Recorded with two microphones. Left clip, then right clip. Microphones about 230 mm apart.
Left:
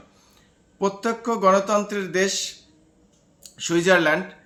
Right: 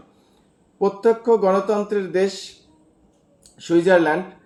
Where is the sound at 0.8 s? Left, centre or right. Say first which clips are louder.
Right 6 dB; left.